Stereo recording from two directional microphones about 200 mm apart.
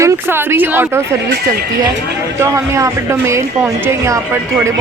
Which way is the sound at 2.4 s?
15° right (ahead or behind).